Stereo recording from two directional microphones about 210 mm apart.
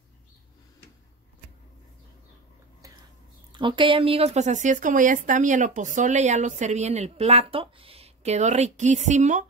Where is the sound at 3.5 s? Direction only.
25° right (ahead or behind).